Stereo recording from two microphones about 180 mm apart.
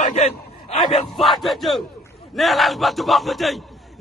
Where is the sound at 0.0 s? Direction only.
35° left (ahead or behind).